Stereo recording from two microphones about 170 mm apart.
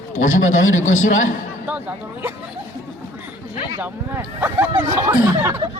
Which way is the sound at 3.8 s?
10° right (ahead or behind).